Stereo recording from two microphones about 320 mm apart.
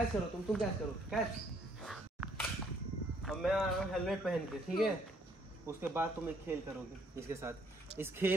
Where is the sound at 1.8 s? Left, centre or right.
Centre.